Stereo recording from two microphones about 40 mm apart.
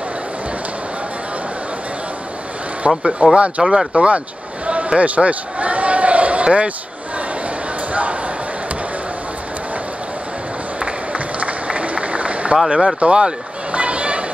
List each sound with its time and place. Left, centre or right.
2.8 s speech: right
4.6 s a sound: right
7.9 s bow-wow: right
10.8 s run: right
12.6 s speech: centre
13.0 s a sound: right